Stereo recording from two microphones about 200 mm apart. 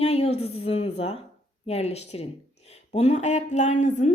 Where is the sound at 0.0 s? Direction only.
30° left (ahead or behind).